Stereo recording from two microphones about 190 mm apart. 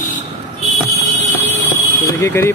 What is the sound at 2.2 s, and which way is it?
Speech, 15° left (ahead or behind).